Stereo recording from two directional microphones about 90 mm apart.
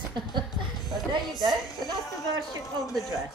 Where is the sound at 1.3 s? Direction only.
Centre (ahead or behind).